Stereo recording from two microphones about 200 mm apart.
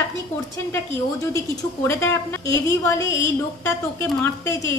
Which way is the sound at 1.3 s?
15° left (ahead or behind).